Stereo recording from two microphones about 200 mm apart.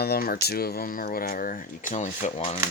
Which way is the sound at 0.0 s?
50° left (ahead or behind).